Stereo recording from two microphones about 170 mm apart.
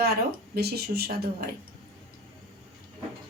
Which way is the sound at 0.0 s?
65° right (ahead or behind).